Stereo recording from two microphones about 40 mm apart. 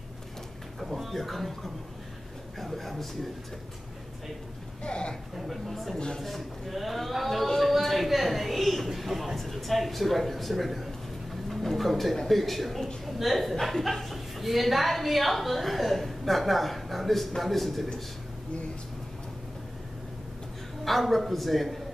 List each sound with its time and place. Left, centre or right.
0.9 s a woman's voice: centre
4.8 s a man's voice: left
5.3 s a woman's voice: centre
5.9 s a man's voice: left
6.2 s a woman's voice: centre
20.8 s a woman's voice: centre